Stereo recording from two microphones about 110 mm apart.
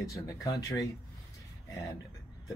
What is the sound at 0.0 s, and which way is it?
Speech, 30° left (ahead or behind).